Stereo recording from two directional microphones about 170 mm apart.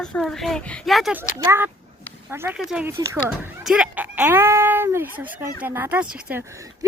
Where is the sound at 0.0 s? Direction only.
Centre (ahead or behind).